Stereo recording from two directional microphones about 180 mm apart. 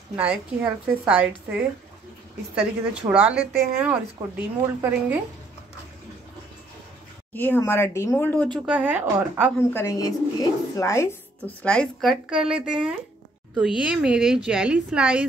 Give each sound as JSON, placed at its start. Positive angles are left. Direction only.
{"t": 0.1, "sound": "a woman's voice", "side_deg": -10}
{"t": 2.5, "sound": "a woman's voice", "side_deg": -5}
{"t": 7.3, "sound": "speech", "side_deg": 10}
{"t": 8.6, "sound": "a woman's voice", "side_deg": -10}
{"t": 9.6, "sound": "a woman's voice", "side_deg": 15}